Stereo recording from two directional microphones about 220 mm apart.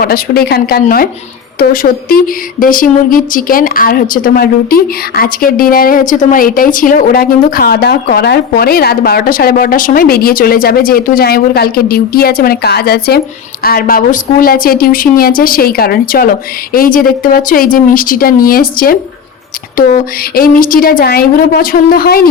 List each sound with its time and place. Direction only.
0.0 s a woman's voice: 45° left (ahead or behind)